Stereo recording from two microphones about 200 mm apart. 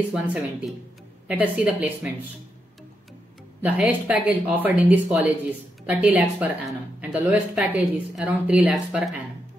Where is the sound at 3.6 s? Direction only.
5° right (ahead or behind).